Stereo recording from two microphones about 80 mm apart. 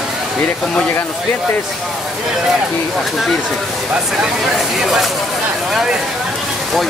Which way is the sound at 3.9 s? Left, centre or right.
Centre.